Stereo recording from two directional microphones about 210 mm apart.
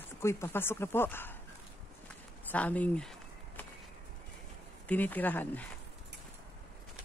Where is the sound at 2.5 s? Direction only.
5° left (ahead or behind).